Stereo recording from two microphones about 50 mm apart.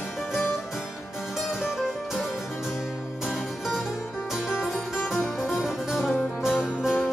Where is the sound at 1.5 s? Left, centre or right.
Centre.